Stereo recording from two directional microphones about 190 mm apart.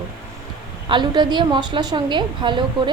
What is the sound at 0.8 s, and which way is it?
A woman's voice, 25° right (ahead or behind).